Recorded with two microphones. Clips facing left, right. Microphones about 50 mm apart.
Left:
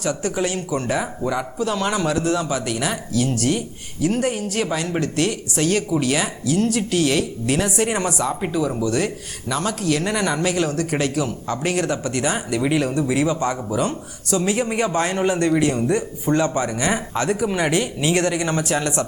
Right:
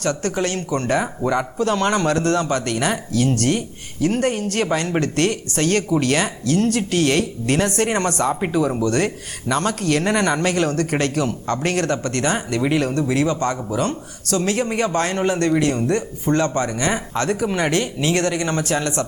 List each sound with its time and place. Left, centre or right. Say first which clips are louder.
0.0 s speech: right 1 dB; centre
8.3 s speech: right 3 dB; centre
8.9 s speech: right 2 dB; centre